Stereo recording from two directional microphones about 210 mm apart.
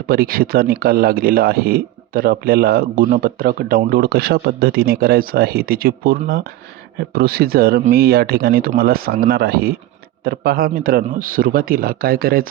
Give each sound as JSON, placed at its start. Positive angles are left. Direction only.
{"t": 0.1, "sound": "speech", "side_deg": -45}